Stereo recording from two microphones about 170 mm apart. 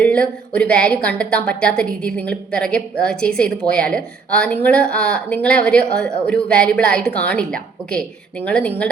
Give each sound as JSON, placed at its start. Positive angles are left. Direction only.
{"t": 0.0, "sound": "speech", "side_deg": 5}